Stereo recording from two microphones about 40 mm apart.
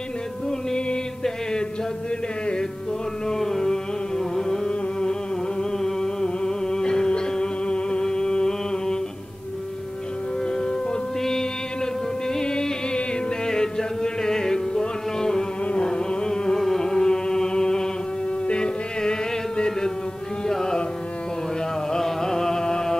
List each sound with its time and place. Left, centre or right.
0.5 s music: centre
3.3 s a sound: centre
5.6 s music: centre
10.5 s music: left
15.6 s carnatic music: left
16.5 s music: centre
20.4 s carnatic music: centre
21.9 s carnatic music: centre